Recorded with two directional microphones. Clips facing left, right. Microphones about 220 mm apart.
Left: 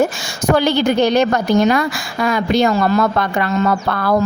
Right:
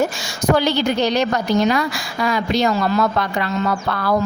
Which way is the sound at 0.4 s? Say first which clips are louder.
Left 3 dB; 50° left (ahead or behind).